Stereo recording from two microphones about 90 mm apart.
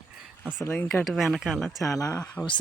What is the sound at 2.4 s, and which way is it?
Speech, 10° left (ahead or behind).